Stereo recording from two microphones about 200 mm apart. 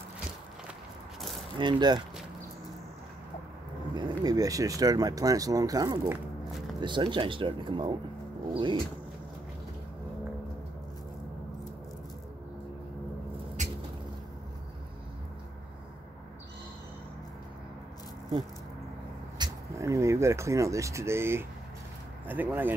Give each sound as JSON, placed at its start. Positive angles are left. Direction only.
{"t": 1.6, "sound": "speech", "side_deg": -25}
{"t": 3.9, "sound": "speech", "side_deg": -20}
{"t": 13.6, "sound": "a sound", "side_deg": -35}
{"t": 19.3, "sound": "speech", "side_deg": -20}